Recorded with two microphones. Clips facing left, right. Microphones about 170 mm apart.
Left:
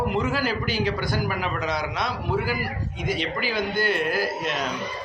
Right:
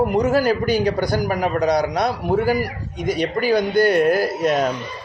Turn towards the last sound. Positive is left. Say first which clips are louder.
# right 8 dB
turn(degrees=-45)  # may be behind; listen again after turning